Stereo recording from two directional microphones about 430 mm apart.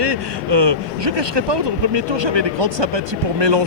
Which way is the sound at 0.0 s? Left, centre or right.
Right.